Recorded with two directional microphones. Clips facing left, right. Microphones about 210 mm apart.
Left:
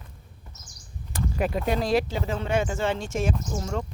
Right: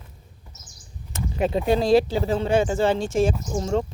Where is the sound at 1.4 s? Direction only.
25° right (ahead or behind).